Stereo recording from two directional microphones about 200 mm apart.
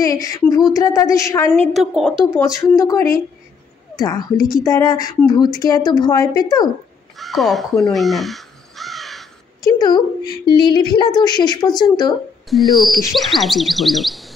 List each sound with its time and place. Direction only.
0.0 s a woman's voice: 15° left (ahead or behind)
1.7 s speech: centre (ahead or behind)
2.3 s a woman's voice: 15° left (ahead or behind)
7.2 s crow: centre (ahead or behind)
9.6 s a woman's voice: 20° left (ahead or behind)
12.5 s speech: centre (ahead or behind)